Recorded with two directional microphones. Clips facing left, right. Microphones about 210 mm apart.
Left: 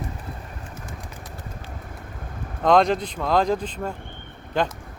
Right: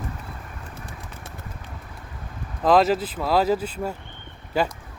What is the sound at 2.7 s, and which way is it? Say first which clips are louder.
Speech: even; 5° right (ahead or behind).